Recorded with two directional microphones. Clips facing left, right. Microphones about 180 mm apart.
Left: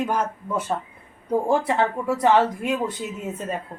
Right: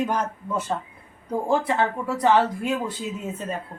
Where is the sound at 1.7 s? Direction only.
20° left (ahead or behind).